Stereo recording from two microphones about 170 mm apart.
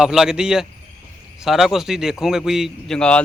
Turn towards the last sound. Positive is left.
turn(degrees=5)  # may be behind; listen again after turning